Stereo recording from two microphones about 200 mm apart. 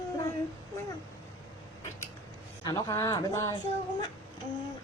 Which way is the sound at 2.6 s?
20° left (ahead or behind).